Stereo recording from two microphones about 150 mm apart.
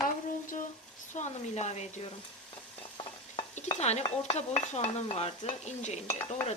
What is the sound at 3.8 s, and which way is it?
Dishes, 45° left (ahead or behind).